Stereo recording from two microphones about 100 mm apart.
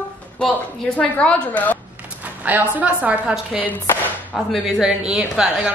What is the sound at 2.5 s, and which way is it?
A woman's voice, 15° right (ahead or behind).